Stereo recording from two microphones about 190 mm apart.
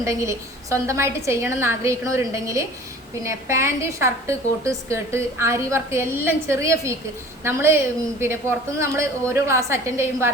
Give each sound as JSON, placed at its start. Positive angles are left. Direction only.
{"t": 0.0, "sound": "a woman's voice", "side_deg": -15}